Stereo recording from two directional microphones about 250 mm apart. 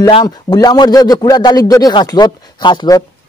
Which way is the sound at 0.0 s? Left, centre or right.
Centre.